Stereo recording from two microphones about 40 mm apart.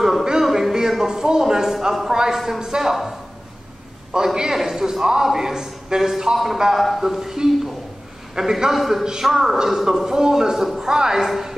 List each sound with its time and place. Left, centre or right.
0.0 s a man's voice: centre
4.1 s a man's voice: centre
9.0 s a man's voice: centre
9.3 s a man's voice: centre